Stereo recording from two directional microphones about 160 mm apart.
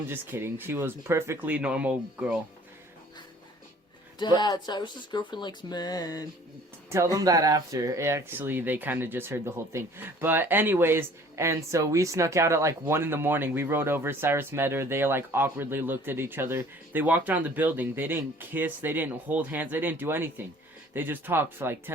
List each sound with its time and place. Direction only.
0.1 s speech: 15° right (ahead or behind)
4.2 s speech: 25° left (ahead or behind)
6.9 s speech: 20° right (ahead or behind)